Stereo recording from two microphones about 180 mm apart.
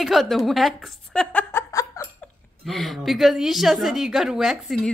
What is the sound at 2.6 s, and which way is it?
A woman's voice, centre (ahead or behind).